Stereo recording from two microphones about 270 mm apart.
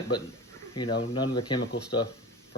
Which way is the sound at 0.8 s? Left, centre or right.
Centre.